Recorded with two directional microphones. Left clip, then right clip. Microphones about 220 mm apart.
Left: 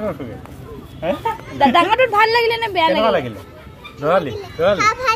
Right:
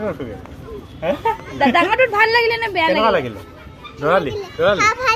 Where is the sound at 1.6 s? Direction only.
20° left (ahead or behind).